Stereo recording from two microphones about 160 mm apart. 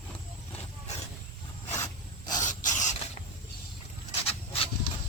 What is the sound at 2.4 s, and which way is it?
Rodents, 50° left (ahead or behind).